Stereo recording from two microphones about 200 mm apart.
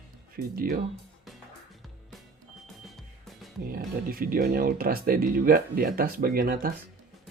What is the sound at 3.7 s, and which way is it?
Speech, 45° right (ahead or behind).